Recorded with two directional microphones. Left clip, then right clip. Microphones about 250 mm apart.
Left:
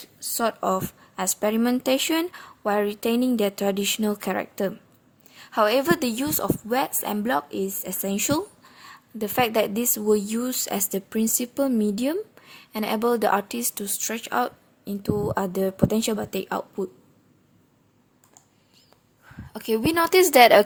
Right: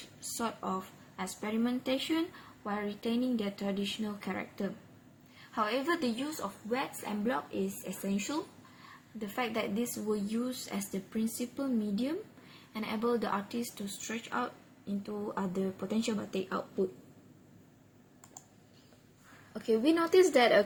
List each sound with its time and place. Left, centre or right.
0.3 s speech: left
19.5 s a woman's voice: left